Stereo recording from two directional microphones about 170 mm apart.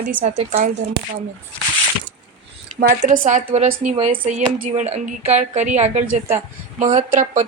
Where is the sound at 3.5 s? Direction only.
35° right (ahead or behind).